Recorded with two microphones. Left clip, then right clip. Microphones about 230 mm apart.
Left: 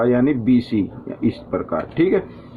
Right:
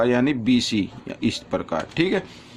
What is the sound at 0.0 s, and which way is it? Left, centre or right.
Speech, right.